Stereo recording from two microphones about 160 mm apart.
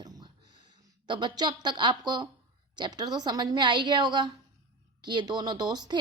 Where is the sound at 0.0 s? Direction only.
25° right (ahead or behind).